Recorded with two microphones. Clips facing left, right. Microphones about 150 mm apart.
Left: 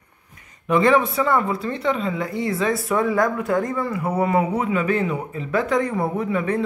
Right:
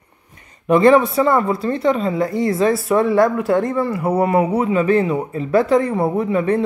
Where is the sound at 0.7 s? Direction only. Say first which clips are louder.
Right 5 dB; 40° right (ahead or behind).